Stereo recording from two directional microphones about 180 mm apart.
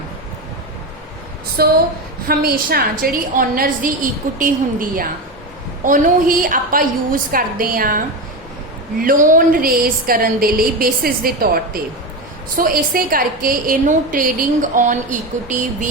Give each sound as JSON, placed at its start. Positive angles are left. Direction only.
{"t": 1.6, "sound": "a woman's voice", "side_deg": -60}